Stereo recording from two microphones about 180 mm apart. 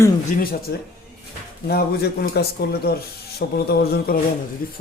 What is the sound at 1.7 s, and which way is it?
Speech, 60° left (ahead or behind).